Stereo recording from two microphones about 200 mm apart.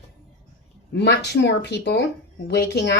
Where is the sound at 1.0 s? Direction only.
60° left (ahead or behind).